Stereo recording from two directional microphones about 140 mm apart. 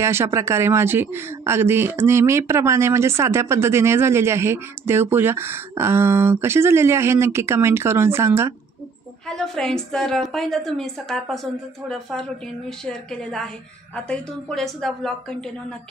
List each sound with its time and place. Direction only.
0.0 s speech: 20° right (ahead or behind)
9.3 s a woman's voice: 5° left (ahead or behind)